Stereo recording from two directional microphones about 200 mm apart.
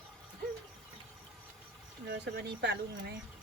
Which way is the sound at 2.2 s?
55° right (ahead or behind).